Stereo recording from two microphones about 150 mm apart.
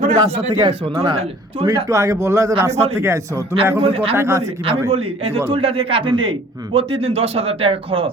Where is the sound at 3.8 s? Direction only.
40° right (ahead or behind).